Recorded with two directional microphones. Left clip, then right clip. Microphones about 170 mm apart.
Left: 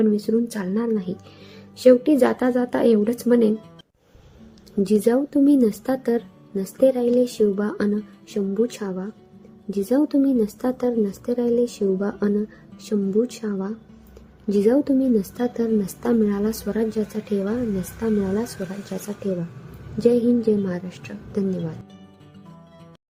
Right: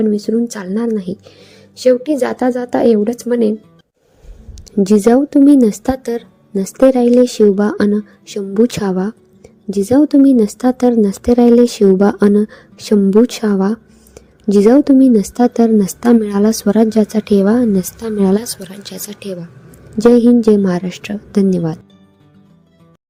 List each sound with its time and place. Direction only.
0.0 s a woman's voice: 35° right (ahead or behind)
4.8 s a woman's voice: 45° right (ahead or behind)
9.6 s speech: 50° right (ahead or behind)
18.6 s speech: 5° left (ahead or behind)
19.2 s speech: 60° right (ahead or behind)
20.0 s a woman's voice: 50° right (ahead or behind)